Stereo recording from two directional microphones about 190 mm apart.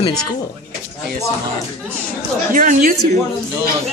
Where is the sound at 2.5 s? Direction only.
45° right (ahead or behind).